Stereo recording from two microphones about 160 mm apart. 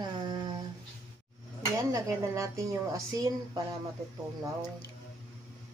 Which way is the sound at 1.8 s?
20° right (ahead or behind).